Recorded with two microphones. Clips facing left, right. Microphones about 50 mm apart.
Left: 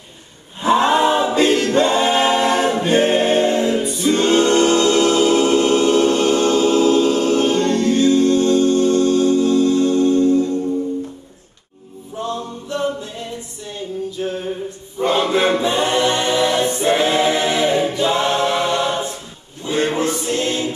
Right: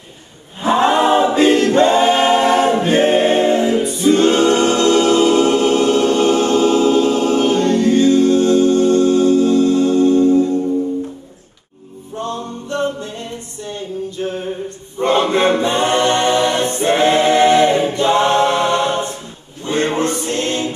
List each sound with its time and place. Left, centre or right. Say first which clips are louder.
0.6 s choir: right 1 dB; centre
1.6 s a capella: right 4 dB; centre
2.8 s choir: right 2 dB; centre
3.3 s music: right 2 dB; centre
6.0 s choir: right 1 dB; centre
9.5 s music: right 2 dB; right
12.2 s a capella: right 1 dB; centre
14.2 s music: right 2 dB; centre
15.0 s a capella: right 2 dB; centre
18.4 s choir: right 3 dB; centre
19.6 s a sound: right 1 dB; centre
20.2 s mantra: right 1 dB; centre